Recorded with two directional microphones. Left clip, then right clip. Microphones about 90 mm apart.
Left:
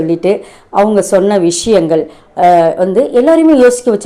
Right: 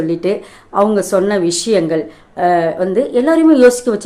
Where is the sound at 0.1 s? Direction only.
25° left (ahead or behind).